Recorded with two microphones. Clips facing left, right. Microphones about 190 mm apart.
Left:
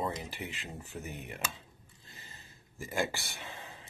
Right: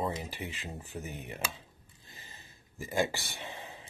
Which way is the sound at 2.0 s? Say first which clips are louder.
Right 1 dB; 15° right (ahead or behind).